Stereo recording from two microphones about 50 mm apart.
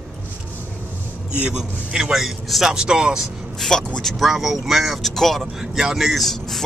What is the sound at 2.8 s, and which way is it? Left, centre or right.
Speech, centre.